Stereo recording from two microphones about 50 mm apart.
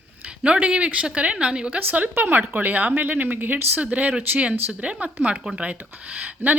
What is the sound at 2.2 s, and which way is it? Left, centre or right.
Speech, right.